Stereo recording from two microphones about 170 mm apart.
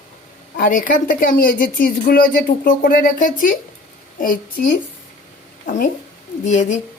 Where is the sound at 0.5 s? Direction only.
50° left (ahead or behind).